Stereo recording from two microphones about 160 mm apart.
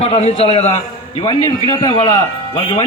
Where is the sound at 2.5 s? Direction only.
40° left (ahead or behind).